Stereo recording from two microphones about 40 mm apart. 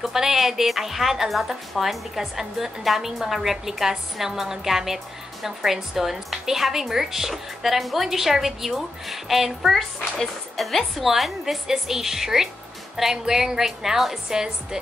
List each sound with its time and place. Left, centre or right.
0.0 s speech: centre